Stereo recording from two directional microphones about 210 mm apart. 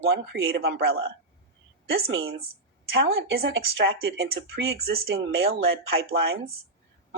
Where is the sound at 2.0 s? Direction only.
75° right (ahead or behind).